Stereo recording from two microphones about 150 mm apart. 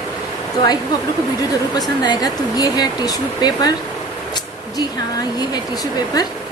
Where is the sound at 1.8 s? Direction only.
25° left (ahead or behind).